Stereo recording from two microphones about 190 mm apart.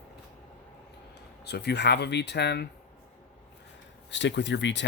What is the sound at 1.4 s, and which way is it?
Speech, 60° left (ahead or behind).